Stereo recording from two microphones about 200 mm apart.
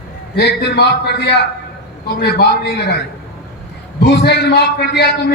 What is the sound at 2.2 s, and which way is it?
Speech, 55° left (ahead or behind).